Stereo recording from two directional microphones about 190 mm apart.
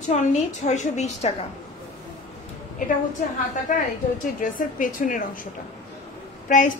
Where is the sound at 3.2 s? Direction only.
45° left (ahead or behind).